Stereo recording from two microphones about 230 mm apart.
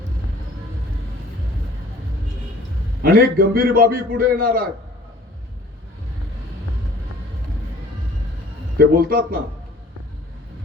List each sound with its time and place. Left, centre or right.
3.0 s a man's voice: right
8.8 s a man's voice: right